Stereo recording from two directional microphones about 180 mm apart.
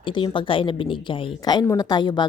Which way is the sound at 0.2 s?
30° left (ahead or behind).